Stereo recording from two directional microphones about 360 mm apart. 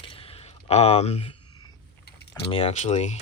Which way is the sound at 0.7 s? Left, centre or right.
Centre.